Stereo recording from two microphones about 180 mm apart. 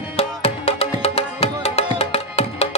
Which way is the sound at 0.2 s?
35° left (ahead or behind).